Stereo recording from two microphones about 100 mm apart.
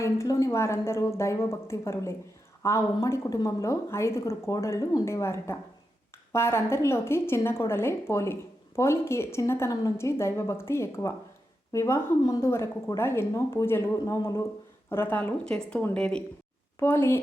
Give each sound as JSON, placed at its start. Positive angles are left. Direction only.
{"t": 0.0, "sound": "a woman's voice", "side_deg": 30}
{"t": 15.4, "sound": "speech", "side_deg": 5}
{"t": 16.8, "sound": "a woman's voice", "side_deg": 25}